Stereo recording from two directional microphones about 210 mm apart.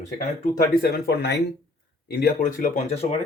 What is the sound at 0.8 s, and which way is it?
Speech, 45° left (ahead or behind).